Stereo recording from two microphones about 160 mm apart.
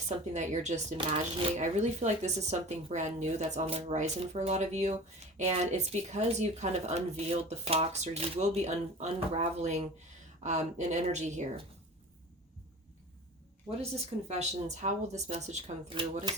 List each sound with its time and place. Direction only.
0.3 s speech: 45° right (ahead or behind)
0.9 s speech: 30° right (ahead or behind)
1.5 s speech: 45° right (ahead or behind)
14.3 s speech: 45° right (ahead or behind)